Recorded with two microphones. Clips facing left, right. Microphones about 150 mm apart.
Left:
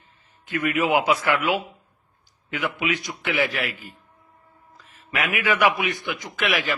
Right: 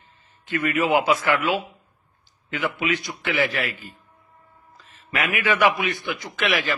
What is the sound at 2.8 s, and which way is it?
A man's voice, 20° left (ahead or behind).